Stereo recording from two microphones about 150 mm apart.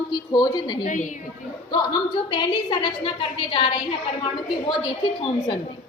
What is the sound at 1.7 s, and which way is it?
A woman's voice, 30° left (ahead or behind).